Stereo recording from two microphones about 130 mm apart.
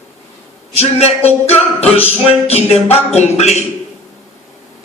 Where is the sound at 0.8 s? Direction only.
50° left (ahead or behind).